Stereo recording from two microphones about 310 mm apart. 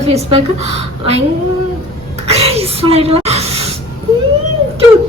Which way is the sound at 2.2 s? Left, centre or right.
Centre.